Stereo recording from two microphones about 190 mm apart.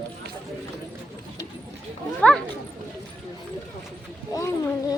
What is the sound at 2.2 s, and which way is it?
Speech, 5° left (ahead or behind).